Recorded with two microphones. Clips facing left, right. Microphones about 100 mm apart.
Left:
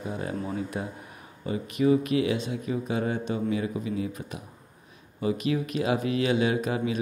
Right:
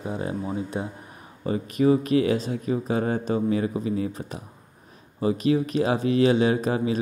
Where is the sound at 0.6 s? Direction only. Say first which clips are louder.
Right 2 dB; 25° right (ahead or behind).